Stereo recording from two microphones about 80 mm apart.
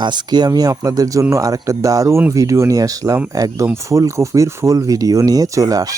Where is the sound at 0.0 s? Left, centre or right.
Right.